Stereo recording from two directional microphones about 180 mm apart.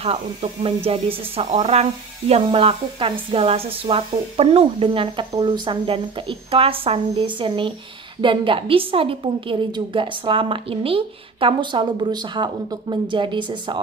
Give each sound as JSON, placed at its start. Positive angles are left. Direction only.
{"t": 0.0, "sound": "a woman's voice", "side_deg": -35}